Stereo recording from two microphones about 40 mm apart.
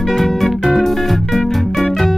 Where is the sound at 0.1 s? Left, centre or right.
Centre.